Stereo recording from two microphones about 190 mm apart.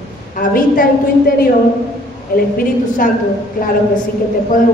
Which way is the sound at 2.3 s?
50° left (ahead or behind).